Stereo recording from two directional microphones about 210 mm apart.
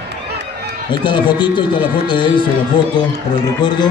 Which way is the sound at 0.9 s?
20° left (ahead or behind).